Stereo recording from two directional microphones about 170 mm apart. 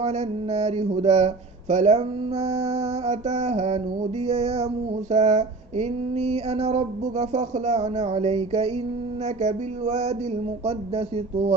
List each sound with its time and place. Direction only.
0.0 s speech: 40° right (ahead or behind)